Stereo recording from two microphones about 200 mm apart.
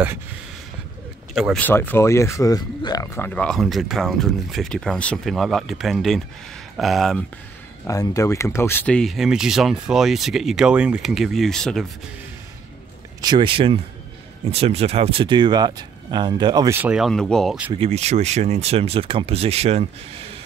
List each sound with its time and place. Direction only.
1.3 s speech: centre (ahead or behind)
1.6 s speech: 10° left (ahead or behind)
7.8 s speech: 15° left (ahead or behind)
13.2 s speech: 25° right (ahead or behind); by 17.7 s 5° right (ahead or behind)
17.7 s speech: 30° right (ahead or behind)